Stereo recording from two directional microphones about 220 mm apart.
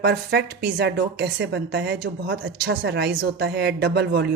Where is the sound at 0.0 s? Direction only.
50° right (ahead or behind).